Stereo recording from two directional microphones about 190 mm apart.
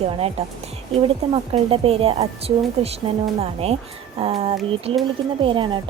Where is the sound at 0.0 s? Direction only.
35° right (ahead or behind).